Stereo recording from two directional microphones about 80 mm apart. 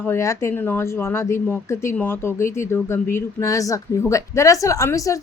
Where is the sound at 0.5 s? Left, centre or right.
Left.